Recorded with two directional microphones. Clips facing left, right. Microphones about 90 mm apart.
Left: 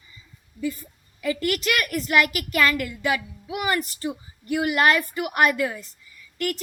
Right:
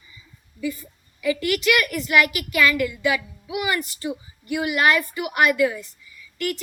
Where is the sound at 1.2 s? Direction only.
45° left (ahead or behind).